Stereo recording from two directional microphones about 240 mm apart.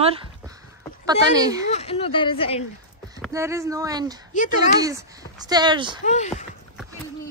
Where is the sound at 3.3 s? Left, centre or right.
Centre.